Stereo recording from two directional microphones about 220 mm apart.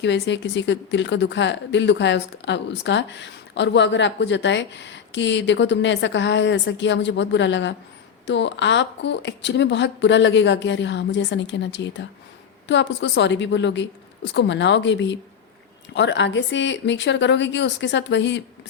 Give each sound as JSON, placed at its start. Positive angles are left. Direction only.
{"t": 0.0, "sound": "speech", "side_deg": 55}